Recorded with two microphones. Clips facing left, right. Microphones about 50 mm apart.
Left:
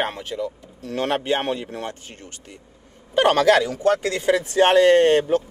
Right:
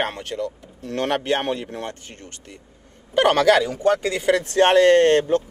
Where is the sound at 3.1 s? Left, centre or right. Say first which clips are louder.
Even; centre.